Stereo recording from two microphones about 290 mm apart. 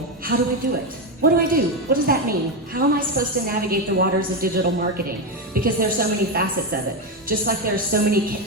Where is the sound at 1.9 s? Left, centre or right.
Right.